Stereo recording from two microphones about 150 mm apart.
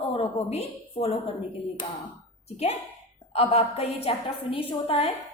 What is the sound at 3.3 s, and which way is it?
A woman's voice, 40° left (ahead or behind).